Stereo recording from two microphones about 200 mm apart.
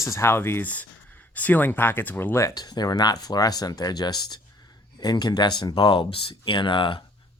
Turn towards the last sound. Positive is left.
turn(degrees=25)  # may be behind; listen again after turning